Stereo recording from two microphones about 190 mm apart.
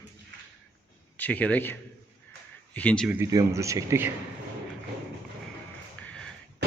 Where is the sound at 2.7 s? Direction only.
5° left (ahead or behind).